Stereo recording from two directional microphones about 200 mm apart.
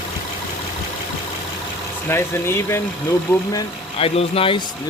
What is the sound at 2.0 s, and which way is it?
Speech, 10° left (ahead or behind).